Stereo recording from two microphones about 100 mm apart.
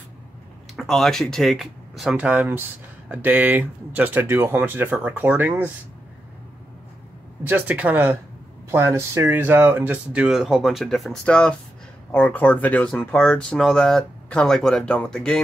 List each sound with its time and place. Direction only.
0.7 s speech: 5° left (ahead or behind)
2.1 s speech: 15° right (ahead or behind)
7.4 s speech: 15° right (ahead or behind)
10.2 s speech: 5° right (ahead or behind)